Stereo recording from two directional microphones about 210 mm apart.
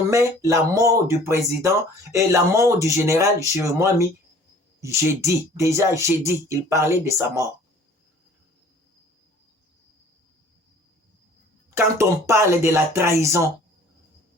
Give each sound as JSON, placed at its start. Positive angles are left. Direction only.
{"t": 0.1, "sound": "speech", "side_deg": -15}
{"t": 11.7, "sound": "speech", "side_deg": -15}